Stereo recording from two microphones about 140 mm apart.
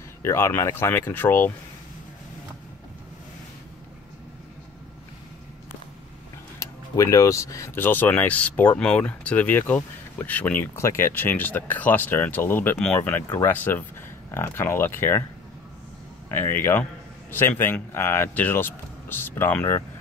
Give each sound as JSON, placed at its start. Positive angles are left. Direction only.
{"t": 0.2, "sound": "speech", "side_deg": 20}
{"t": 6.6, "sound": "speech", "side_deg": 25}
{"t": 16.3, "sound": "speech", "side_deg": 15}